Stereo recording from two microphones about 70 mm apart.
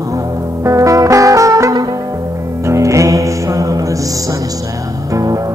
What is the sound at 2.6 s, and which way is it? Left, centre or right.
Music, right.